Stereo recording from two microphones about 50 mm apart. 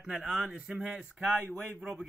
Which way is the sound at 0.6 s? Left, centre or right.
Centre.